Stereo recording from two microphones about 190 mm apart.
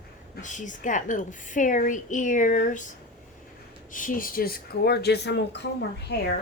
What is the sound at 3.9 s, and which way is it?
Speech, 45° left (ahead or behind).